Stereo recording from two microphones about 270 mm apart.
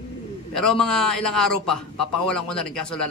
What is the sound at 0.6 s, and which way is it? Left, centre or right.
A man's voice, centre.